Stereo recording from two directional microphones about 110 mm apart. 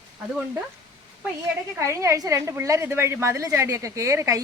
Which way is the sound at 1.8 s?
25° right (ahead or behind).